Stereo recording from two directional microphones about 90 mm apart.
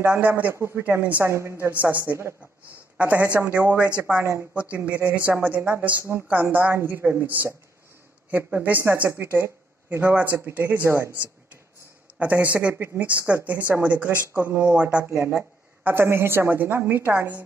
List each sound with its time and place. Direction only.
0.0 s speech: 20° right (ahead or behind)
0.6 s a woman's voice: 30° right (ahead or behind)
0.8 s speech: 20° right (ahead or behind)
1.2 s a woman's voice: 30° right (ahead or behind)
1.7 s speech: 20° right (ahead or behind)
3.0 s speech: 15° right (ahead or behind)
4.2 s speech: 25° right (ahead or behind)
4.6 s speech: 15° right (ahead or behind)
12.2 s speech: 15° right (ahead or behind)